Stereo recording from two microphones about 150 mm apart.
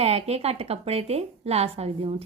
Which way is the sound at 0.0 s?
45° right (ahead or behind).